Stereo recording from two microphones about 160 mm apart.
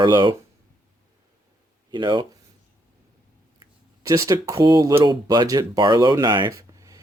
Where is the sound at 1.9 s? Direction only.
30° right (ahead or behind).